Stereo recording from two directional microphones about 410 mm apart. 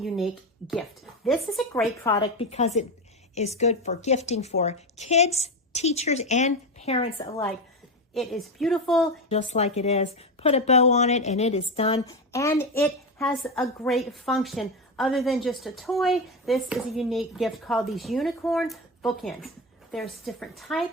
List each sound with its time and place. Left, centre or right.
1.2 s a woman's voice: centre
8.1 s a woman's voice: centre
9.3 s a woman's voice: centre